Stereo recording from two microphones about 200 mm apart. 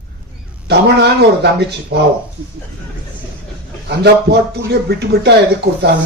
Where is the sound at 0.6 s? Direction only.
55° right (ahead or behind).